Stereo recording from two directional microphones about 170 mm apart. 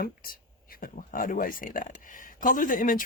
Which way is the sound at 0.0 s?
60° left (ahead or behind).